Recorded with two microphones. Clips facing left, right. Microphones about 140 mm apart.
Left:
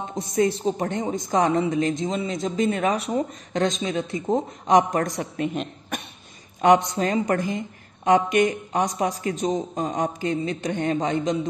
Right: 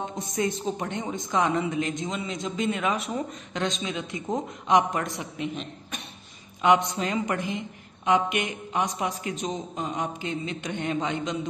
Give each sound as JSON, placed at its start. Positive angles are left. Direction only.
{"t": 0.1, "sound": "a woman's voice", "side_deg": 35}
{"t": 6.6, "sound": "a woman's voice", "side_deg": 40}